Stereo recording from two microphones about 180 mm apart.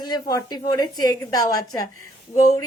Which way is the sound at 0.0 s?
20° left (ahead or behind).